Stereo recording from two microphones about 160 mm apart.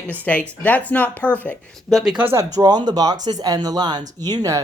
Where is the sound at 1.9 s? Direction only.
5° right (ahead or behind).